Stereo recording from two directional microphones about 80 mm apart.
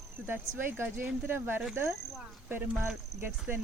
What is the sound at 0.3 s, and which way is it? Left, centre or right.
Speech, right.